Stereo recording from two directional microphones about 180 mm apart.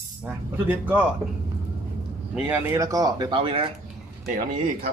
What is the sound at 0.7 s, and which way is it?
Speech, 10° right (ahead or behind).